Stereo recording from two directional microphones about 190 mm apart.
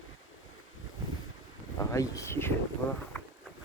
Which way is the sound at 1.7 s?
15° left (ahead or behind).